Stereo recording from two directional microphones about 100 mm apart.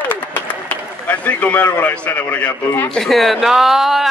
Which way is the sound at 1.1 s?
15° left (ahead or behind).